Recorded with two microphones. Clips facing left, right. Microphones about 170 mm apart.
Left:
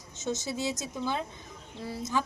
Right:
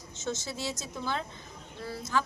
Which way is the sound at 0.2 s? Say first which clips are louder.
Left 3 dB; 15° left (ahead or behind).